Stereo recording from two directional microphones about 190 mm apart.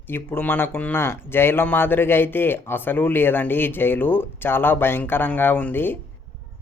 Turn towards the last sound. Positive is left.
turn(degrees=10)  # may be behind; listen again after turning